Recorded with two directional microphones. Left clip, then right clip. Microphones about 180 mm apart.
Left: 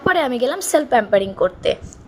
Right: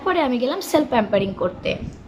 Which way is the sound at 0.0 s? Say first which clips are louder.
Left 3 dB; 35° left (ahead or behind).